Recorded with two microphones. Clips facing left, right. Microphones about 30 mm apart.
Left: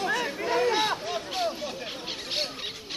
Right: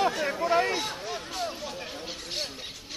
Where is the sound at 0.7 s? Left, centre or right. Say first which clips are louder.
Left 5 dB; left.